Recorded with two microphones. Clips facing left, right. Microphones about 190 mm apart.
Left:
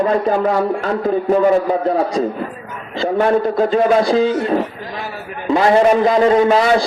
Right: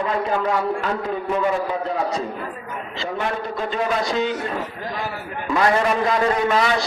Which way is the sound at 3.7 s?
35° left (ahead or behind).